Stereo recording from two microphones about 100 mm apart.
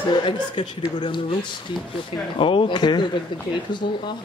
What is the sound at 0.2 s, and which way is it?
Speech, 50° left (ahead or behind).